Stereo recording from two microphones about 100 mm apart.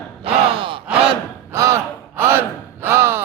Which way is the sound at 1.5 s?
30° right (ahead or behind).